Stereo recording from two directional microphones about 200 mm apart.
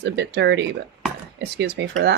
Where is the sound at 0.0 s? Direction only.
55° right (ahead or behind).